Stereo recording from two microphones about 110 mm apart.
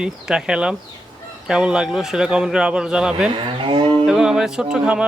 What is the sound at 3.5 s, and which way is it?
Moo, 50° right (ahead or behind).